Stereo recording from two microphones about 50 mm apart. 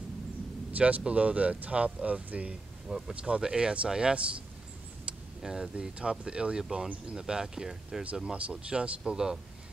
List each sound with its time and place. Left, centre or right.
0.7 s speech: right
5.4 s speech: centre
8.3 s speech: right